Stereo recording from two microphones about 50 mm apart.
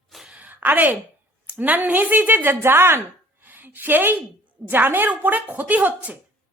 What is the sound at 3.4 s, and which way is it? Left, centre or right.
A woman's voice, right.